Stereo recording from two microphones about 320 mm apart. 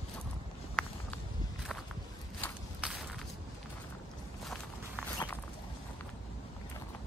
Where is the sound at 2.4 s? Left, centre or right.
Centre.